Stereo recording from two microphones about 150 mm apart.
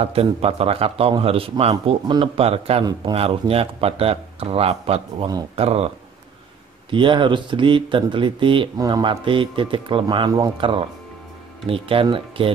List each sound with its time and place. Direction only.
0.0 s speech: 40° right (ahead or behind)
2.8 s speech: 25° right (ahead or behind)
3.2 s speech: 40° right (ahead or behind)
6.9 s speech: 35° right (ahead or behind)